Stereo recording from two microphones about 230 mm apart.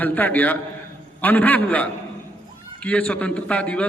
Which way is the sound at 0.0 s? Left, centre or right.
Centre.